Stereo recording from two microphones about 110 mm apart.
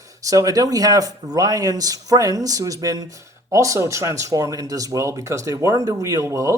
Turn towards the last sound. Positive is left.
turn(degrees=-30)  # may be behind; listen again after turning